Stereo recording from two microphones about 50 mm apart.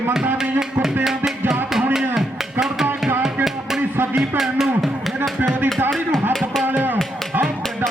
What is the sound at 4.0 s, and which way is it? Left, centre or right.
Music, right.